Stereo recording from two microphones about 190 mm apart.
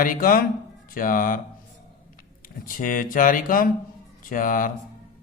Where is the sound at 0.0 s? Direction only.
45° left (ahead or behind).